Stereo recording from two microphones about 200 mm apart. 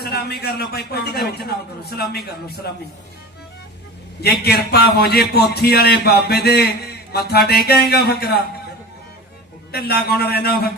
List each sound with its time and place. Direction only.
0.0 s speech: 50° left (ahead or behind)
4.4 s speech: 50° left (ahead or behind)
9.7 s speech: 50° left (ahead or behind)